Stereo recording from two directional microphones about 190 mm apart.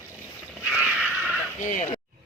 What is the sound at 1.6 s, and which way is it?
Speech, 45° left (ahead or behind).